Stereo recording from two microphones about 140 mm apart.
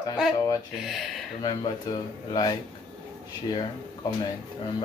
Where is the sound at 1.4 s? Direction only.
35° left (ahead or behind).